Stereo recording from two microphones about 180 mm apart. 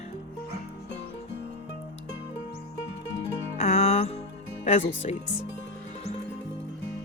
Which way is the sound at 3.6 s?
35° left (ahead or behind).